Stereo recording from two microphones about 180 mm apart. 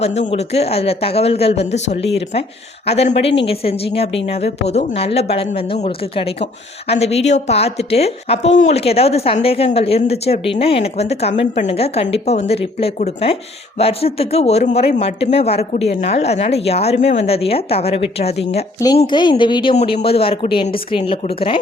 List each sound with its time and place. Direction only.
0.0 s a woman's voice: 35° left (ahead or behind)
19.7 s a woman's voice: 40° left (ahead or behind)